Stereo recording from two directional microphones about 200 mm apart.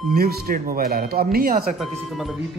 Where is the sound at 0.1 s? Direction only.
50° right (ahead or behind).